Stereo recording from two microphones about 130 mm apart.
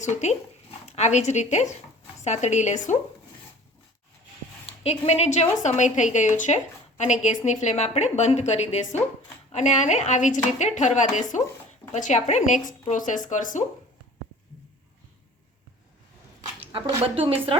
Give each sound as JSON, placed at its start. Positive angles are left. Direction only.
{"t": 0.0, "sound": "a woman's voice", "side_deg": 60}
{"t": 4.6, "sound": "a woman's voice", "side_deg": 55}
{"t": 16.7, "sound": "a woman's voice", "side_deg": -45}